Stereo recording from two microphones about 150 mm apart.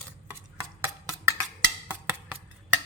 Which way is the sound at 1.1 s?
5° right (ahead or behind).